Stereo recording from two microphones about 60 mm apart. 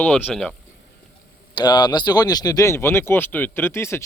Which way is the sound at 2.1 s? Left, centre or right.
Left.